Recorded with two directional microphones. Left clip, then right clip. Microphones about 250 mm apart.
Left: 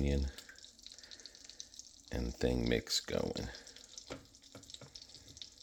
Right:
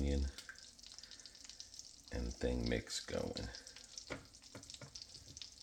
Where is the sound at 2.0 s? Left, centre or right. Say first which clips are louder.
Left 5 dB; left.